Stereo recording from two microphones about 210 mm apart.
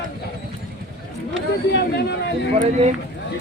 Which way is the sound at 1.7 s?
55° left (ahead or behind).